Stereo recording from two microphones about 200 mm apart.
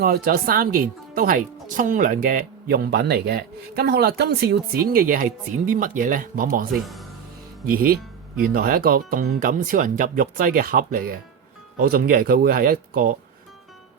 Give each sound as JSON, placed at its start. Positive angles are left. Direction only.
{"t": 0.0, "sound": "speech", "side_deg": -45}
{"t": 6.8, "sound": "speech", "side_deg": 0}
{"t": 7.7, "sound": "speech", "side_deg": -45}